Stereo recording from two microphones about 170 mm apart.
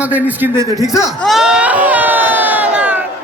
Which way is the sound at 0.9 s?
15° left (ahead or behind).